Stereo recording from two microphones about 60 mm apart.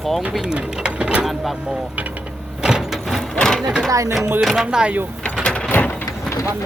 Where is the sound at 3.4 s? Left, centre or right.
Centre.